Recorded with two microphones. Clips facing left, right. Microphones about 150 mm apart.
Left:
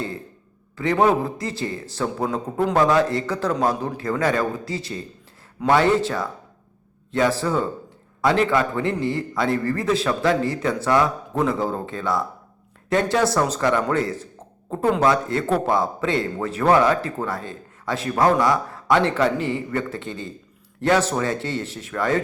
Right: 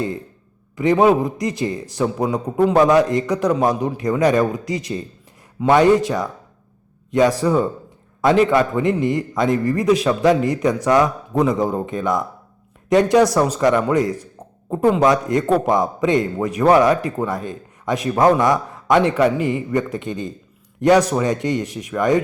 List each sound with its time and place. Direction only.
0.8 s speech: 15° right (ahead or behind)